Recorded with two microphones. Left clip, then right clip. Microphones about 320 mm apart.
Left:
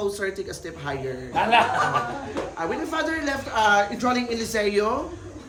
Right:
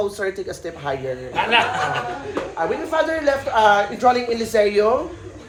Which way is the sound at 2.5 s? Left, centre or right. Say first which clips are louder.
Right 7 dB; centre.